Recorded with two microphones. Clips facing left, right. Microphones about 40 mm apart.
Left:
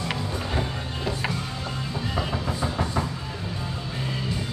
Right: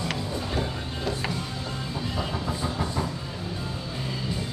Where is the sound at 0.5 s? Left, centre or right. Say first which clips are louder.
Left 1 dB; centre.